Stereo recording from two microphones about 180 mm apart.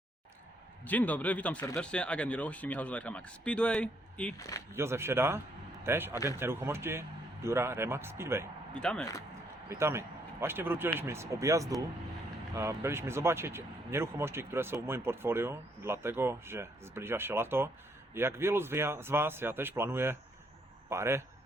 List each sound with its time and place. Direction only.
0.9 s speech: 10° left (ahead or behind)
4.4 s speech: 20° left (ahead or behind)
4.7 s speech: 15° right (ahead or behind)
8.7 s speech: 5° left (ahead or behind)
9.6 s speech: 15° right (ahead or behind)